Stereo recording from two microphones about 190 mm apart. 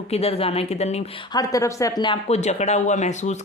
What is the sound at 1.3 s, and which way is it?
Speech, 15° left (ahead or behind).